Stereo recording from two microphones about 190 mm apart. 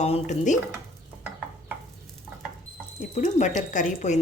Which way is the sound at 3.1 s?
40° left (ahead or behind).